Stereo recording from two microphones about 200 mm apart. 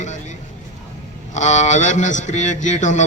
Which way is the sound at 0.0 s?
35° left (ahead or behind).